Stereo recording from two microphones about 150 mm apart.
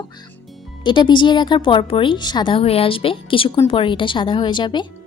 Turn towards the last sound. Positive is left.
turn(degrees=30)  # may be behind; listen again after turning